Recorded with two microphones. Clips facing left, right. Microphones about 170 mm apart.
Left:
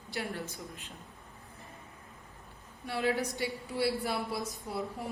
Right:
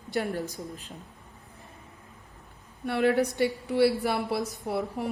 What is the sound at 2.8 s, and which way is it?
A woman's voice, 60° right (ahead or behind).